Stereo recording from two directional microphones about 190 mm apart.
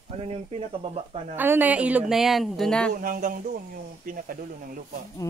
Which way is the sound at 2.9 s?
45° right (ahead or behind).